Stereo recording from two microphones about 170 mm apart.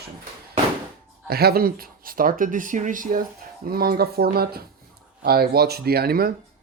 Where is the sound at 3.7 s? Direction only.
60° right (ahead or behind).